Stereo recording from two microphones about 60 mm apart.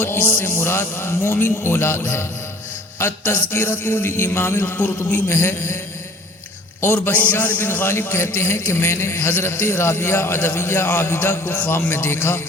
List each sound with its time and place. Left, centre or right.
0.0 s a man's voice: left
6.8 s speech: left
7.1 s a man's voice: left
7.7 s a man's voice: left